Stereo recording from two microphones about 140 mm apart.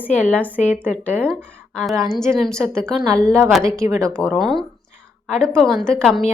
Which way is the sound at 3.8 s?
20° right (ahead or behind).